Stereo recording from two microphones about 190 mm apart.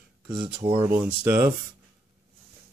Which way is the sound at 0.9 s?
10° right (ahead or behind).